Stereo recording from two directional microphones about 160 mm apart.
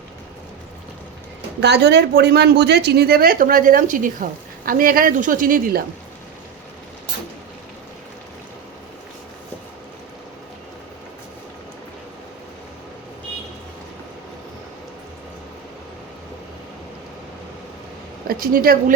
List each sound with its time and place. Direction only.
1.6 s a woman's voice: 90° right; by 5.8 s 60° right (ahead or behind)
18.3 s a woman's voice: 65° right (ahead or behind)